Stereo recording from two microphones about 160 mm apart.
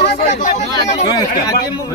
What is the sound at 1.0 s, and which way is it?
Speech, 25° left (ahead or behind).